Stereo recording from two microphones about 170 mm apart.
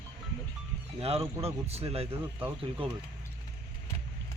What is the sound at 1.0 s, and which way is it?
Speech, 35° right (ahead or behind).